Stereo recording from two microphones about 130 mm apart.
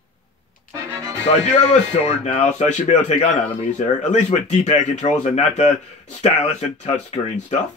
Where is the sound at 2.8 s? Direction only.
70° left (ahead or behind).